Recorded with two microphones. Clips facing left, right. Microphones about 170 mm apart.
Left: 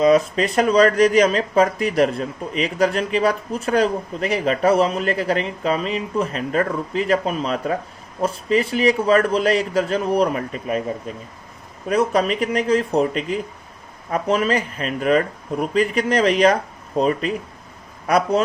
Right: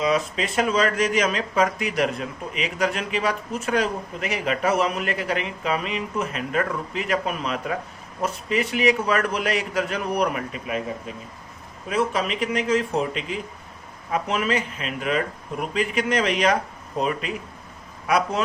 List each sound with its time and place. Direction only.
0.0 s speech: 40° left (ahead or behind)
11.9 s speech: 40° left (ahead or behind)